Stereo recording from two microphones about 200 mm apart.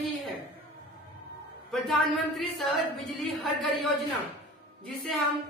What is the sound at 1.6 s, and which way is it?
A man's voice, centre (ahead or behind).